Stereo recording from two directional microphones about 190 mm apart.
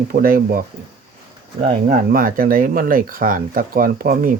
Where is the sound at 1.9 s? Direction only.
50° right (ahead or behind).